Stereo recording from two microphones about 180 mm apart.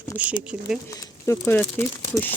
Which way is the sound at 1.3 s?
15° left (ahead or behind).